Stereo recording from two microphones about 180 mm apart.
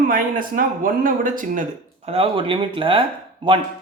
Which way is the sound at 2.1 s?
30° right (ahead or behind).